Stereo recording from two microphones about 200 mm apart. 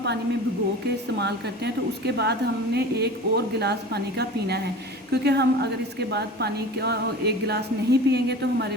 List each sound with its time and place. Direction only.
1.2 s speech: 55° right (ahead or behind)